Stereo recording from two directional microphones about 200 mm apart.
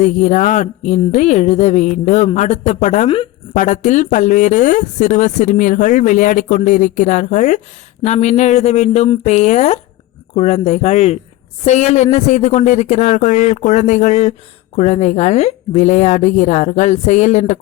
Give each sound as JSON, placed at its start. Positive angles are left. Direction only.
{"t": 0.0, "sound": "speech", "side_deg": 35}